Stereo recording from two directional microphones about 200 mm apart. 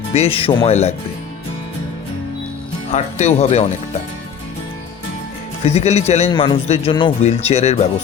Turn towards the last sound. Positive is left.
turn(degrees=35)  # may be behind; listen again after turning